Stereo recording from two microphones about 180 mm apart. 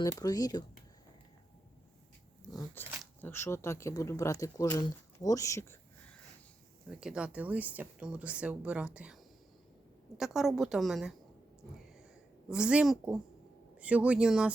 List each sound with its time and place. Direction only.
0.0 s speech: 20° left (ahead or behind)
2.7 s speech: 10° left (ahead or behind)
6.9 s speech: 5° right (ahead or behind)
10.2 s a woman's voice: centre (ahead or behind)
12.5 s a woman's voice: 5° right (ahead or behind)